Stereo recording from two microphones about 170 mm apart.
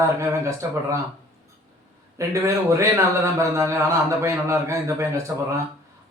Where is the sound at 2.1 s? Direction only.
15° right (ahead or behind).